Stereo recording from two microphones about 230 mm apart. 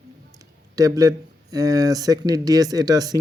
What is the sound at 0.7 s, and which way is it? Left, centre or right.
Speech, centre.